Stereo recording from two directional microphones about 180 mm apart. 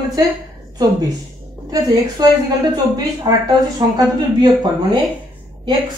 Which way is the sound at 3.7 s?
25° right (ahead or behind).